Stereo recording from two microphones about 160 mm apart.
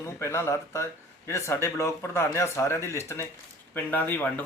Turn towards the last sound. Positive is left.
turn(degrees=10)  # may be behind; listen again after turning